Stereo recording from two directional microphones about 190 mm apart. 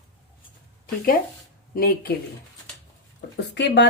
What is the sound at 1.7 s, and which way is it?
Speech, 50° left (ahead or behind).